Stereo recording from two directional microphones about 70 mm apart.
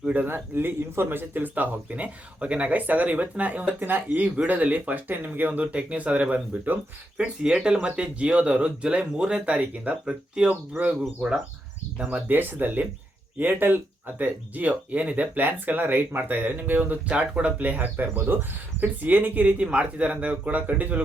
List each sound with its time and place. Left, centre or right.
0.0 s speech: right
0.3 s speech: right